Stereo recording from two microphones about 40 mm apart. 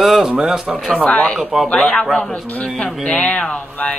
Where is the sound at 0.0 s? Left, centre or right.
Centre.